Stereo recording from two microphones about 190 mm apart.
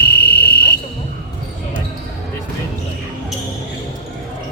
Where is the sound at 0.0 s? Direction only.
55° left (ahead or behind).